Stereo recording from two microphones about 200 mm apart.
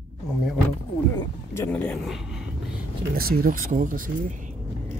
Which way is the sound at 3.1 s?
45° right (ahead or behind).